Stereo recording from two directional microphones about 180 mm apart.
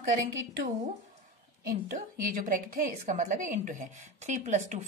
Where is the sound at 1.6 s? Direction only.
55° right (ahead or behind).